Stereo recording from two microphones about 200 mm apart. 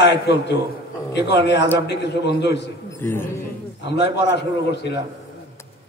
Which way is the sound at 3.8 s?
60° left (ahead or behind).